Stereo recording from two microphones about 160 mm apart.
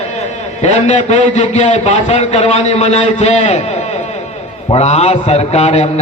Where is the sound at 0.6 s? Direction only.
45° left (ahead or behind).